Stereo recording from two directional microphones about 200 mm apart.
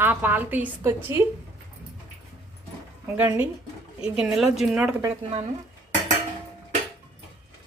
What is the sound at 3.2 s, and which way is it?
A woman's voice, 10° right (ahead or behind).